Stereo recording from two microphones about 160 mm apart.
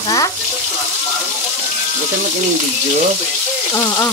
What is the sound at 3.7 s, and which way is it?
Speech, 20° left (ahead or behind).